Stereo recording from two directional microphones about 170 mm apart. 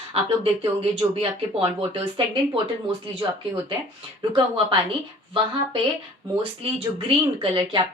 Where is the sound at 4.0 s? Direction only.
30° right (ahead or behind).